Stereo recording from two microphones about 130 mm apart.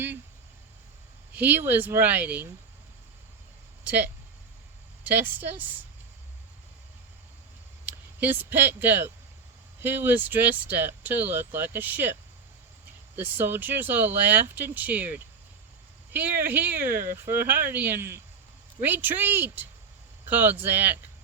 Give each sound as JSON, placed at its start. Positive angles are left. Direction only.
{"t": 1.3, "sound": "speech", "side_deg": -15}
{"t": 3.8, "sound": "speech", "side_deg": -10}
{"t": 7.9, "sound": "speech", "side_deg": -15}
{"t": 13.1, "sound": "speech", "side_deg": -15}